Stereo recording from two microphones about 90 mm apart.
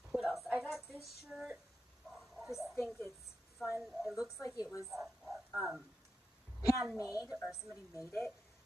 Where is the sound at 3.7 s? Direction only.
5° right (ahead or behind).